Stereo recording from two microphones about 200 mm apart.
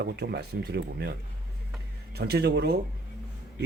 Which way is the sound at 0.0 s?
55° right (ahead or behind).